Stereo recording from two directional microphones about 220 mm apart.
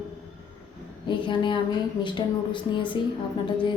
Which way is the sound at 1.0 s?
20° left (ahead or behind).